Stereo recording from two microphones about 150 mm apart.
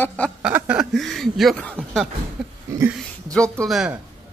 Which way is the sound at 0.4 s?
10° right (ahead or behind).